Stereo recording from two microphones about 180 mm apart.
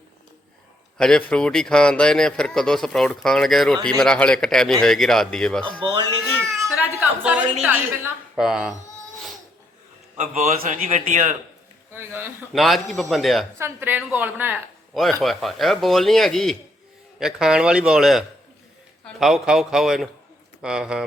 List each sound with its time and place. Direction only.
0.9 s a man's voice: 5° left (ahead or behind)
6.6 s a man's voice: 10° right (ahead or behind)
10.2 s a man's voice: 40° right (ahead or behind)
11.9 s speech: 10° right (ahead or behind)
12.5 s a man's voice: centre (ahead or behind)
13.6 s a man's voice: 10° right (ahead or behind)